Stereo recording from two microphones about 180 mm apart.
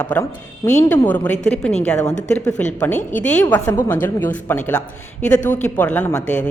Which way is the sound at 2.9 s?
45° left (ahead or behind).